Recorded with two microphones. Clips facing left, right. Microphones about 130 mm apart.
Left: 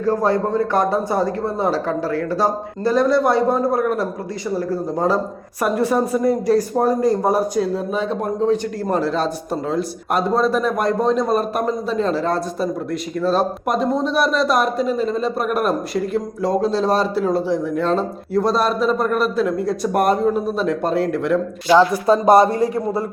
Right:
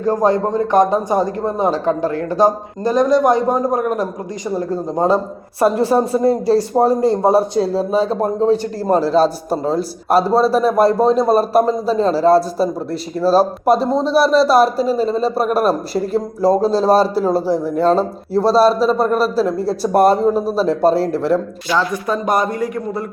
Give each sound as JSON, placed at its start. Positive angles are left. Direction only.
{"t": 0.0, "sound": "a man's voice", "side_deg": -15}
{"t": 22.0, "sound": "speech", "side_deg": 30}